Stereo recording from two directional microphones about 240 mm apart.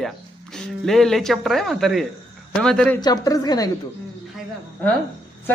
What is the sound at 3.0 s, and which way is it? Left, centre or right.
Speech, centre.